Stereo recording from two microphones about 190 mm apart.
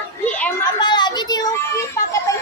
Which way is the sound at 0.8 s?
25° left (ahead or behind).